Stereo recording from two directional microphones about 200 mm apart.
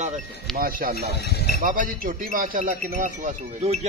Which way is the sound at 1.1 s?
55° left (ahead or behind).